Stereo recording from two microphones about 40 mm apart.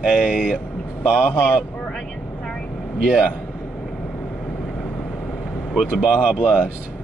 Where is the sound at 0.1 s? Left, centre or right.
Right.